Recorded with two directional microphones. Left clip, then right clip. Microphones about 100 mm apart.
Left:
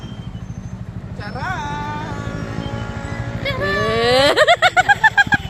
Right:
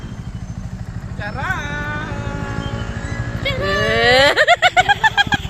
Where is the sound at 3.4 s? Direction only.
5° left (ahead or behind).